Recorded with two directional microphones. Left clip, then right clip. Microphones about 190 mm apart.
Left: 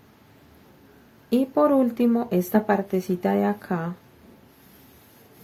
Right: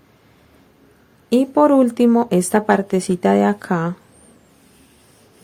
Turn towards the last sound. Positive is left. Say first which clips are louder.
# right 7 dB
turn(degrees=-40)  # may be behind; listen again after turning